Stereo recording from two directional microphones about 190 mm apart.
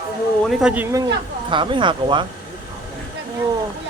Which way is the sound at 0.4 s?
5° right (ahead or behind).